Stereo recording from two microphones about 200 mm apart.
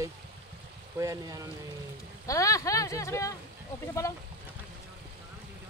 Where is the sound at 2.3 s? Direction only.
15° left (ahead or behind).